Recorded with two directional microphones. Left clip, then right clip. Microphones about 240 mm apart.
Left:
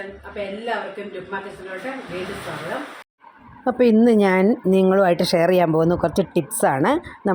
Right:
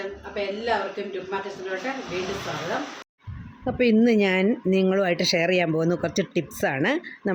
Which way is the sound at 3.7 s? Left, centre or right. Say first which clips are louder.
Left 5 dB; centre.